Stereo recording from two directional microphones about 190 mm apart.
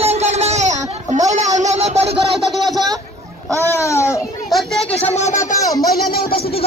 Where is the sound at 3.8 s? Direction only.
15° left (ahead or behind).